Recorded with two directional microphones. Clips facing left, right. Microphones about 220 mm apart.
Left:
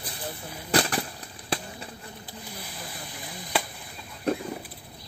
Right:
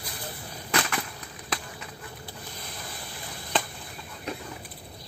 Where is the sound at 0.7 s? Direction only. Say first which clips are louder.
Left 4 dB; 35° left (ahead or behind).